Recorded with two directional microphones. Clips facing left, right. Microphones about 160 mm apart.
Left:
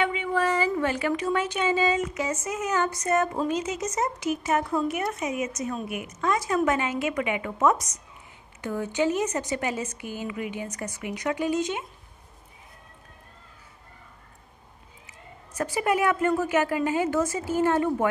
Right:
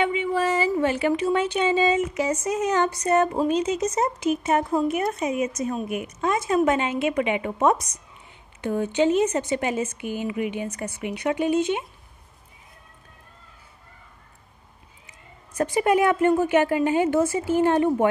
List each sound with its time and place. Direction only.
0.0 s a sound: 25° right (ahead or behind)
0.3 s a sound: 10° right (ahead or behind)
0.8 s speech: 30° right (ahead or behind)
2.5 s a sound: 35° right (ahead or behind)
3.3 s speech: 15° right (ahead or behind)
3.9 s speech: 30° right (ahead or behind)
15.5 s speech: 30° right (ahead or behind)
17.2 s speech: 10° right (ahead or behind)
17.6 s speech: 25° right (ahead or behind)